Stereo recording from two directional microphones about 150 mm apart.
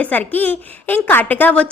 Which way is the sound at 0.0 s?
10° left (ahead or behind).